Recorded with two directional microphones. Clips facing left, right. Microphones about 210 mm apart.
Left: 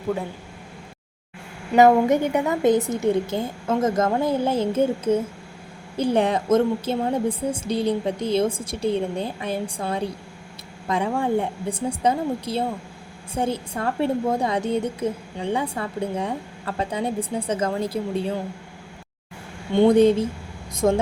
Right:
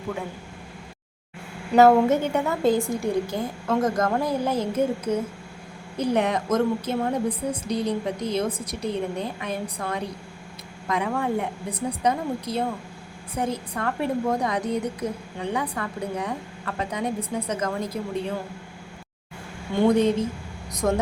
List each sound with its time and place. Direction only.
1.7 s a woman's voice: 15° left (ahead or behind); by 18.0 s 30° left (ahead or behind)
20.8 s a woman's voice: 25° left (ahead or behind)